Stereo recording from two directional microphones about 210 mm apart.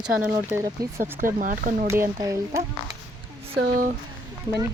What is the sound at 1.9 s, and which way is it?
Speech, 15° right (ahead or behind).